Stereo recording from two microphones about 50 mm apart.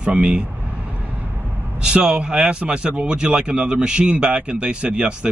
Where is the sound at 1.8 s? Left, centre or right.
Centre.